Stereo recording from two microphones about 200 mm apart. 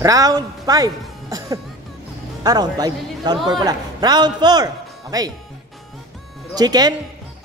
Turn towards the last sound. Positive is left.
turn(degrees=-20)  # may be behind; listen again after turning